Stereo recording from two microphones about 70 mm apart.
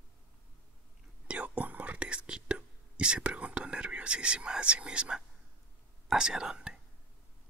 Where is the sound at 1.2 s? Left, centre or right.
Centre.